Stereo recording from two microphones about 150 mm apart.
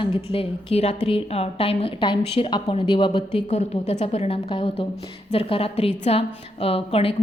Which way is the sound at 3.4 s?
50° left (ahead or behind).